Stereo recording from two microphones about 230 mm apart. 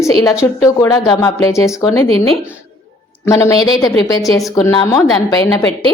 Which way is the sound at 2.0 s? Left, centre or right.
Right.